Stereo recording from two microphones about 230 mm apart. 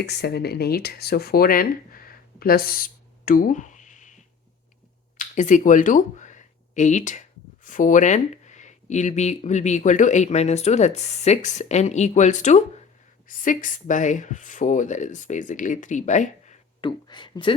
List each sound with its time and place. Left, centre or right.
0.0 s speech: left
17.1 s speech: centre